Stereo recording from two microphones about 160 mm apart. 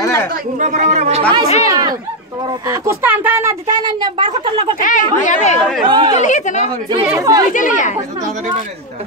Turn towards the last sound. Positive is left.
turn(degrees=55)  # may be behind; listen again after turning